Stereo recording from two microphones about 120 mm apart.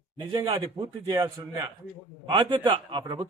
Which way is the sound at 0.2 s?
45° right (ahead or behind).